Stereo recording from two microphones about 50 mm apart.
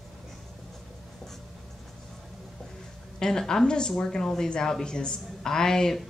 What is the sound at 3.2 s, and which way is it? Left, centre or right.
A woman's voice, centre.